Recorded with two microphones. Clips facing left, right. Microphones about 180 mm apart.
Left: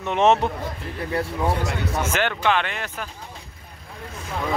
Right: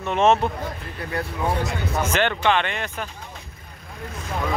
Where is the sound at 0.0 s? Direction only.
20° left (ahead or behind).